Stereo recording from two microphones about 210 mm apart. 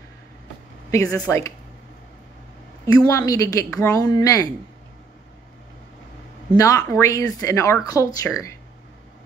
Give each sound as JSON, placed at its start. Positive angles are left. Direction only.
{"t": 0.9, "sound": "speech", "side_deg": 5}
{"t": 3.1, "sound": "speech", "side_deg": 15}
{"t": 6.5, "sound": "speech", "side_deg": 15}